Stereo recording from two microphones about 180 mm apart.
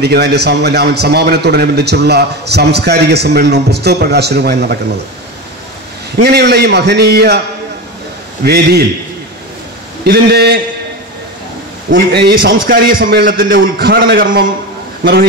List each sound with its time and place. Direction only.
0.0 s a man's voice: 65° right (ahead or behind)
6.1 s a man's voice: 65° right (ahead or behind)
8.5 s a man's voice: 60° right (ahead or behind)
10.0 s a man's voice: 60° right (ahead or behind)
11.9 s a man's voice: 55° right (ahead or behind)